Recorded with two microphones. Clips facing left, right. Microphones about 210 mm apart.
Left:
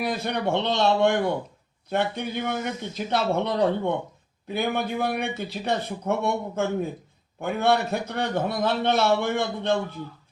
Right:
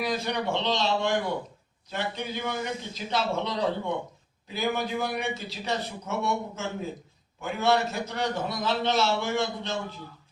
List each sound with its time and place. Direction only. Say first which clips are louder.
0.0 s speech: left 2 dB; 55° left (ahead or behind)